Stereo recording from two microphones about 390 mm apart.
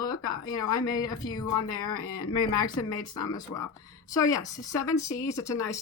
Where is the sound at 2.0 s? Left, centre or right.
Left.